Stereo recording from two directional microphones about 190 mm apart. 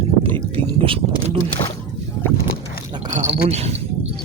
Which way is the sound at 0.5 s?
30° right (ahead or behind).